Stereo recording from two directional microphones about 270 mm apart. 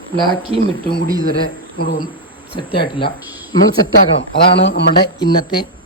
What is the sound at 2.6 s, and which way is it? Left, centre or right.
Speech, centre.